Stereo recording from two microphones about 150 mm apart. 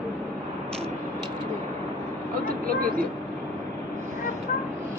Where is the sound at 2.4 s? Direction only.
70° right (ahead or behind).